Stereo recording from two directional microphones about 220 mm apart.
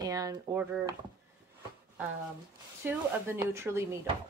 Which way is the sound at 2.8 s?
10° right (ahead or behind).